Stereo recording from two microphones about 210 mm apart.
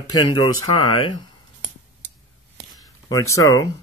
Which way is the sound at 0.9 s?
25° left (ahead or behind).